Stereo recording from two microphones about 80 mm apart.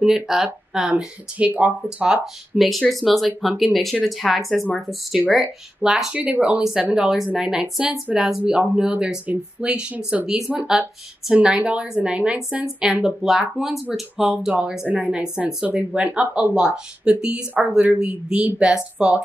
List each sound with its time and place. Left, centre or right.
0.0 s speech: centre